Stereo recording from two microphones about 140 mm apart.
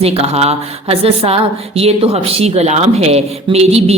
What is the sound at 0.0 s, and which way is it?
A woman's voice, 45° right (ahead or behind).